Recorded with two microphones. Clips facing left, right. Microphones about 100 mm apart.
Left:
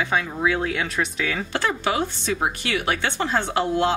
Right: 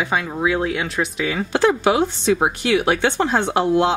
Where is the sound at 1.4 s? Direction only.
20° right (ahead or behind).